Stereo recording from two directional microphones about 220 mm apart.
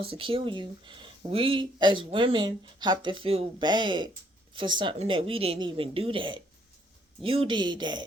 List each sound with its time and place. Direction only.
0.0 s speech: 25° right (ahead or behind)